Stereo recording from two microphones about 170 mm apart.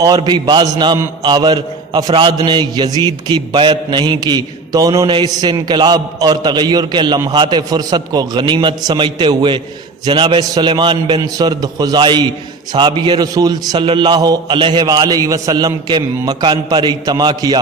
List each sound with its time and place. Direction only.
0.2 s a man's voice: 25° right (ahead or behind)